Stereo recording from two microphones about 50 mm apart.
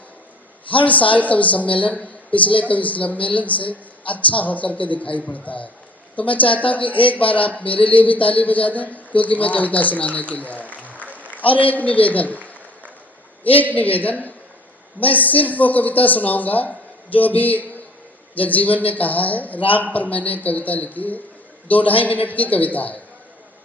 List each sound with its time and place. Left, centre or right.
0.9 s a woman's voice: left
13.7 s a woman's voice: left